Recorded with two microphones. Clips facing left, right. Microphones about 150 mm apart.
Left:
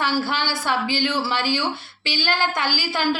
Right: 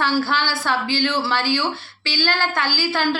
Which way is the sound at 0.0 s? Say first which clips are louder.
Right 2 dB; 15° left (ahead or behind).